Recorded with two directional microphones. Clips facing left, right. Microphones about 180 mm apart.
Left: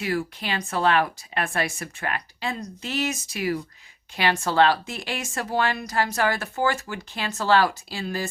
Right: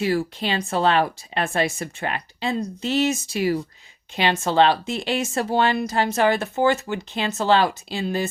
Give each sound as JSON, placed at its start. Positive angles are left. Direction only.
{"t": 0.0, "sound": "speech", "side_deg": -30}